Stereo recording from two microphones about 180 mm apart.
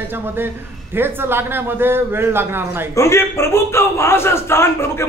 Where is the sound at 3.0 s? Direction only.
15° left (ahead or behind).